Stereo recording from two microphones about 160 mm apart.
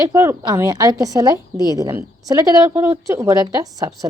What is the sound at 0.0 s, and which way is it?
A woman's voice, 20° right (ahead or behind).